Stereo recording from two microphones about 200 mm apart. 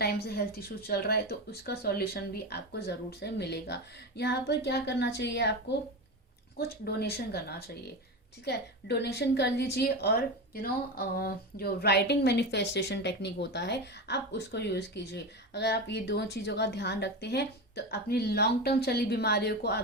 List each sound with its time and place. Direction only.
0.0 s a woman's voice: 50° left (ahead or behind)
6.6 s speech: 50° left (ahead or behind)
8.4 s a woman's voice: 55° left (ahead or behind)